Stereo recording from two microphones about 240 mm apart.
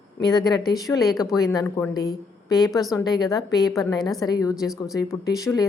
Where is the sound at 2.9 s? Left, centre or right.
Centre.